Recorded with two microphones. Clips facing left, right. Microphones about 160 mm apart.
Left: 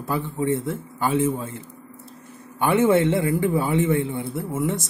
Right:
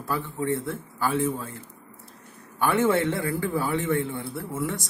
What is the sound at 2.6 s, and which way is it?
A man's voice, 20° left (ahead or behind).